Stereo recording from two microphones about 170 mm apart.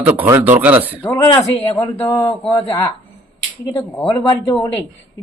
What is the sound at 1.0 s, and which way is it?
A man's voice, 15° left (ahead or behind).